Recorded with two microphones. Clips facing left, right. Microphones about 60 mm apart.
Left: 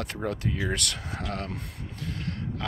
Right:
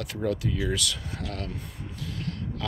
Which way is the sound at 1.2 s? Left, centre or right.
Left.